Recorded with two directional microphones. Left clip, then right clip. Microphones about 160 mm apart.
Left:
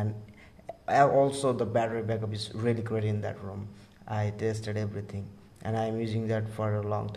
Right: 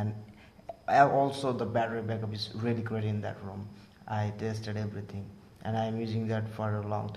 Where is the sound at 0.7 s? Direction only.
25° left (ahead or behind).